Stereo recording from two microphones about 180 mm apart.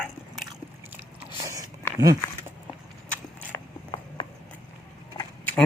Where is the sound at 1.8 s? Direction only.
10° left (ahead or behind).